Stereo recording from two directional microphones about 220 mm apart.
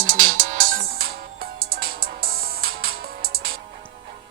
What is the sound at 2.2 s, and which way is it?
Music, 45° right (ahead or behind).